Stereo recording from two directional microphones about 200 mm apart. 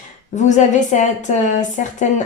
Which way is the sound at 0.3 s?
35° left (ahead or behind).